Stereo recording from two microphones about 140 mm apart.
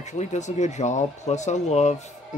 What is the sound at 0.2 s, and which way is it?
Speech, 55° left (ahead or behind).